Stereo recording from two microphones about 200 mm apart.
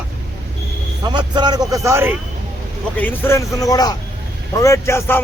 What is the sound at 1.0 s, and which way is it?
Speech, 20° right (ahead or behind).